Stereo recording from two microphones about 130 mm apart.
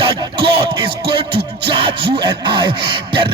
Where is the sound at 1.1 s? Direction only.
40° right (ahead or behind).